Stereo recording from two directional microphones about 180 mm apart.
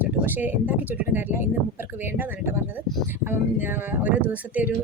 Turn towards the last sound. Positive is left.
turn(degrees=-10)  # may be behind; listen again after turning